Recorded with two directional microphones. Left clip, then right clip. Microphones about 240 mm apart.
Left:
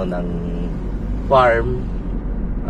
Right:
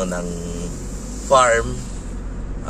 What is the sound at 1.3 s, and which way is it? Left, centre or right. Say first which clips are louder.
Speech: left 1 dB; right.